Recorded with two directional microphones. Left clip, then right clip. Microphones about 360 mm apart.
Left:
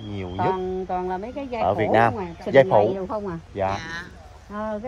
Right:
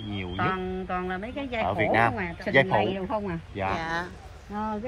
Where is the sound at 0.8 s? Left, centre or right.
Centre.